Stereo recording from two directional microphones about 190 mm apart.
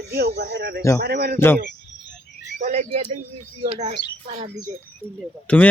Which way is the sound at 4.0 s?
65° left (ahead or behind).